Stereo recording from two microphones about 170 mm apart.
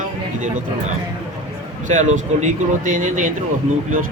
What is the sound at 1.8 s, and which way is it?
Speech, 45° right (ahead or behind).